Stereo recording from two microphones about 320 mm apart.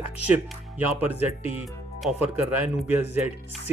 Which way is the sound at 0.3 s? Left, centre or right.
Centre.